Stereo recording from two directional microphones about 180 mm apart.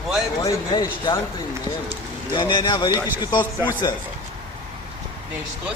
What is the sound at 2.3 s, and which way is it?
A man's voice, 25° left (ahead or behind).